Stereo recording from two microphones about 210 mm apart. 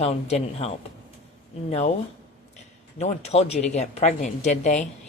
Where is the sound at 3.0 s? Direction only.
30° left (ahead or behind).